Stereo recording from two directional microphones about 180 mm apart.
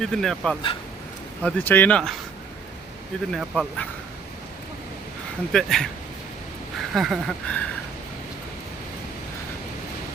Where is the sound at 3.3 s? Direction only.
Centre (ahead or behind).